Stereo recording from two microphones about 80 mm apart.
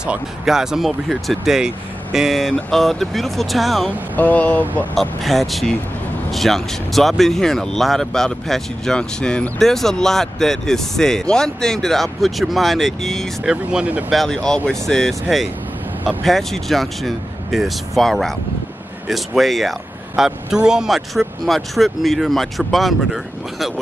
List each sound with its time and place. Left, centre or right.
0.0 s speech: centre
4.2 s speech: centre
4.9 s speech: centre
13.5 s speech: centre
14.1 s speech: centre